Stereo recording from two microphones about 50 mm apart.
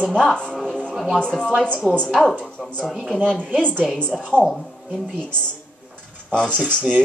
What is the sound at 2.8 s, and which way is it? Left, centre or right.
Speech, centre.